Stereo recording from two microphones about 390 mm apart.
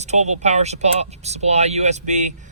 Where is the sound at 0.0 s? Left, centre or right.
Centre.